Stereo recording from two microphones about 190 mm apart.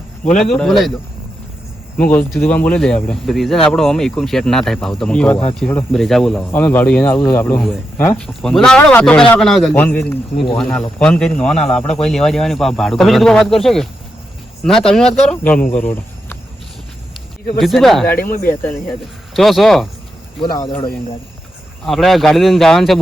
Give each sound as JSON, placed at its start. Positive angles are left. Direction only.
{"t": 0.5, "sound": "speech", "side_deg": 0}
{"t": 2.0, "sound": "a man's voice", "side_deg": 10}
{"t": 17.2, "sound": "speech", "side_deg": 0}
{"t": 19.3, "sound": "speech", "side_deg": 0}
{"t": 20.4, "sound": "speech", "side_deg": 20}
{"t": 21.8, "sound": "speech", "side_deg": 0}